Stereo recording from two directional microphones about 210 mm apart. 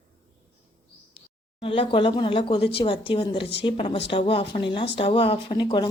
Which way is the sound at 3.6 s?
25° left (ahead or behind).